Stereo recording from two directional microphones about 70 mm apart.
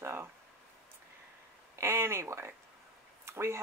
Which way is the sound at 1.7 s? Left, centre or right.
Right.